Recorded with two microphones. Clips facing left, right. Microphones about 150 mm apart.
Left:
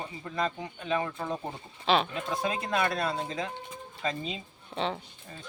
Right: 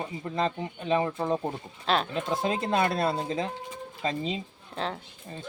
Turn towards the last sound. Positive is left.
turn(degrees=0)  # may be behind; listen again after turning